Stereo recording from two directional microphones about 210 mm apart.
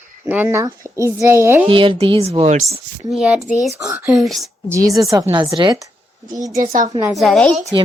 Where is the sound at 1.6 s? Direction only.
25° right (ahead or behind).